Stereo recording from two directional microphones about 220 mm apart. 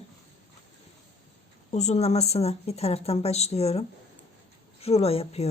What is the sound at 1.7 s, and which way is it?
A woman's voice, 30° left (ahead or behind).